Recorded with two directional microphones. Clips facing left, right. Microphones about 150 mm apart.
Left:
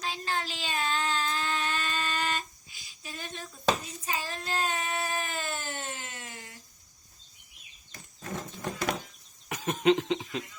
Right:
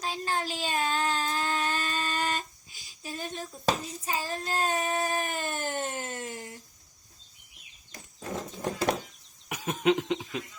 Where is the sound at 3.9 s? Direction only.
40° right (ahead or behind).